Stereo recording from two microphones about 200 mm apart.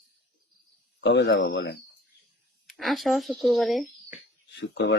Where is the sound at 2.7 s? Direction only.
Centre (ahead or behind).